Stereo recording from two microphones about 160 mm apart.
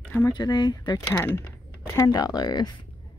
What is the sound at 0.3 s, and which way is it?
Speech, 25° left (ahead or behind).